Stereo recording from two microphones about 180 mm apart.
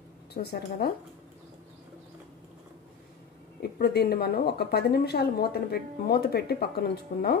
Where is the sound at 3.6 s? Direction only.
65° left (ahead or behind).